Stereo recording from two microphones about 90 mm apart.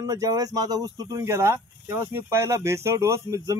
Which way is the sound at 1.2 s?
30° right (ahead or behind).